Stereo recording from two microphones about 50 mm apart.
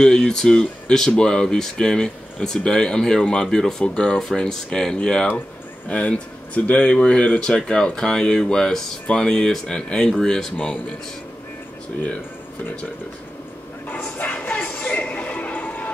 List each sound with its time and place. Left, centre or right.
0.0 s speech: centre
3.8 s speech: left
4.4 s speech: centre
13.8 s music: left